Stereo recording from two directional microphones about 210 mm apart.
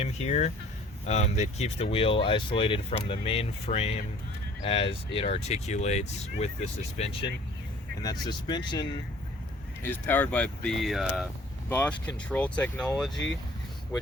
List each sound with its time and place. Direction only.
0.0 s speech: 30° left (ahead or behind)
8.0 s speech: 20° left (ahead or behind)
9.8 s speech: 10° left (ahead or behind)